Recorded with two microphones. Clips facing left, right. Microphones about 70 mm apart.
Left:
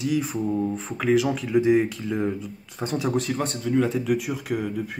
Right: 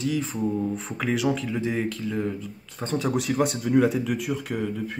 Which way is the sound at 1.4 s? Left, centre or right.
Centre.